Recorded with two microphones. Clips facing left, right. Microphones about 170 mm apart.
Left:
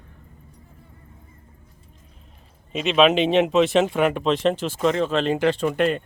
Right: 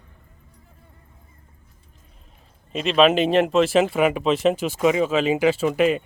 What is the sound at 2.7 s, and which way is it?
Speech, centre (ahead or behind).